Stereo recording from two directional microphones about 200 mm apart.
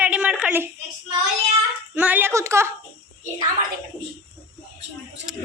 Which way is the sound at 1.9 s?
10° right (ahead or behind).